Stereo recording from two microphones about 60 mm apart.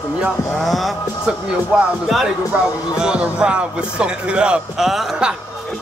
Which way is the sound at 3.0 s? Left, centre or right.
Centre.